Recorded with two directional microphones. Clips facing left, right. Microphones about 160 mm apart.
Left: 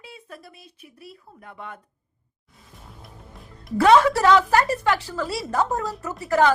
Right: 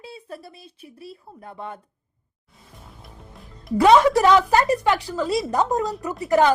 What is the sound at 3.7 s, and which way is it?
A woman's voice, 15° right (ahead or behind).